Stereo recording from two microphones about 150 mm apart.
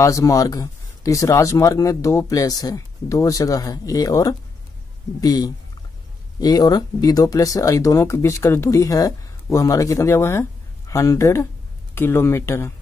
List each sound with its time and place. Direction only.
0.0 s speech: 20° left (ahead or behind)